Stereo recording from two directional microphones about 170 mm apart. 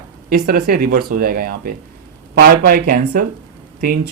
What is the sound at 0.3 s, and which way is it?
Speech, 60° right (ahead or behind).